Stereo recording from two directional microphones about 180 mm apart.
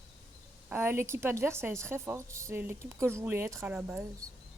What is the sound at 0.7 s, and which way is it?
A woman's voice, 15° right (ahead or behind).